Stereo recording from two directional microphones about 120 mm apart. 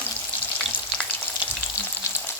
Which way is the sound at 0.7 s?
15° left (ahead or behind).